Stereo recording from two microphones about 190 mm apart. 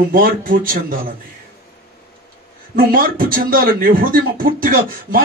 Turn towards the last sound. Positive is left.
turn(degrees=-50)  # may be behind; listen again after turning